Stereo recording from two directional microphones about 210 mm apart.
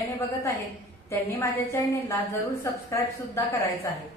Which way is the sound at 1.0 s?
15° left (ahead or behind).